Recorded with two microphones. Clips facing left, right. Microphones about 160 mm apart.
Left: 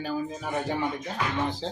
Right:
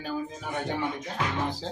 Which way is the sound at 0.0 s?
5° left (ahead or behind).